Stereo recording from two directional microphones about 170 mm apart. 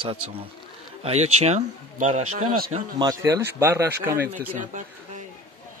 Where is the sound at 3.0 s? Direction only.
20° right (ahead or behind).